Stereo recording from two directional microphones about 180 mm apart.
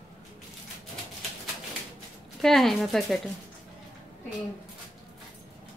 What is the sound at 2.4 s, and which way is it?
Speech, centre (ahead or behind).